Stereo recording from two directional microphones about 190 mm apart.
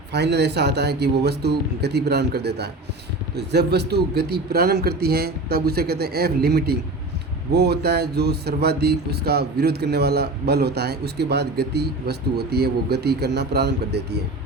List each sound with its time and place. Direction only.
0.1 s speech: 60° right (ahead or behind)